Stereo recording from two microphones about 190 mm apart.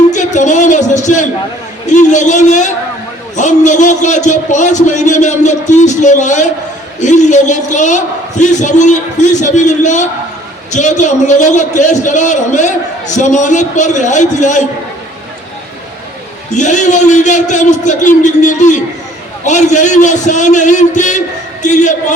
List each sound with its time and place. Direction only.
0.1 s a sound: 40° left (ahead or behind)
1.9 s a man's voice: 40° left (ahead or behind)
16.5 s a man's voice: 40° left (ahead or behind)